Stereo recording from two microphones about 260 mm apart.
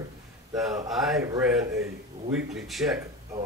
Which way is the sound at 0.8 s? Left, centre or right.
Centre.